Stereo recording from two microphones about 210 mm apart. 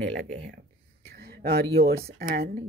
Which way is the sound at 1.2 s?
50° right (ahead or behind).